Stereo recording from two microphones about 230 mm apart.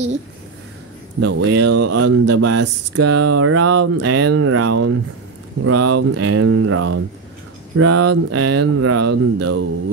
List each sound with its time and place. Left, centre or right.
1.2 s speech: right